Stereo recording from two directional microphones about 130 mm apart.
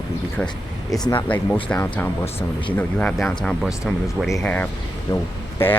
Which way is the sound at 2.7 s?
10° left (ahead or behind).